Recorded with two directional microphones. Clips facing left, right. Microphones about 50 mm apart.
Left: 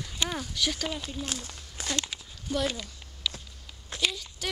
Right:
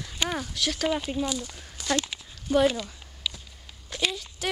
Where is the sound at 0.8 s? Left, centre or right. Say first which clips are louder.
Right 7 dB; right.